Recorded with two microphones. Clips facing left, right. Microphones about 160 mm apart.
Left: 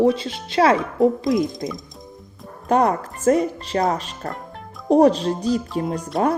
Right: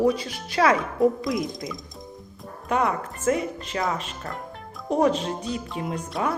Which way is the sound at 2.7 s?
35° left (ahead or behind).